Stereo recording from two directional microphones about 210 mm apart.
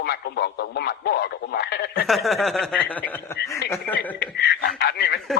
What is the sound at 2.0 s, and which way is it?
Speech, centre (ahead or behind).